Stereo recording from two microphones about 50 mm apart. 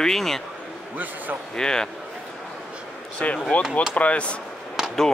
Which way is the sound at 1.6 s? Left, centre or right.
Centre.